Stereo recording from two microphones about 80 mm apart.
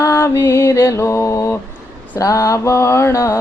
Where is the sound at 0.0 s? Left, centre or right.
Left.